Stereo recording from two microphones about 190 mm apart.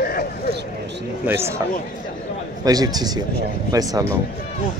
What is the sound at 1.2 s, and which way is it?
Speech, 10° right (ahead or behind).